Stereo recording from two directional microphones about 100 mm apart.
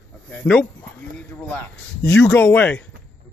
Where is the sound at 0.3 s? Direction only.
10° left (ahead or behind).